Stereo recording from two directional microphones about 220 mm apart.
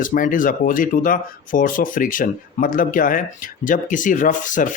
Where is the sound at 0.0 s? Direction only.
35° left (ahead or behind).